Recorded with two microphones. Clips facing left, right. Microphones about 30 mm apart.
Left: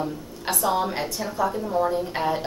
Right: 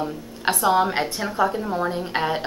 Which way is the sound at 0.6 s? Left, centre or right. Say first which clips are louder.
Right 4 dB; centre.